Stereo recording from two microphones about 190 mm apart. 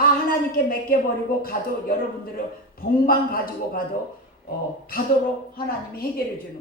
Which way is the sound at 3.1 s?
50° left (ahead or behind).